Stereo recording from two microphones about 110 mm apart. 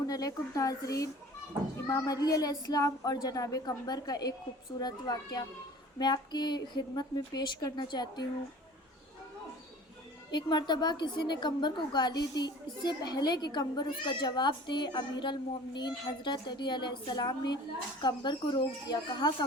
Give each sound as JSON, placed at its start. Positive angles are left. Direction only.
{"t": 0.1, "sound": "speech", "side_deg": 35}
{"t": 10.3, "sound": "a child's voice", "side_deg": 40}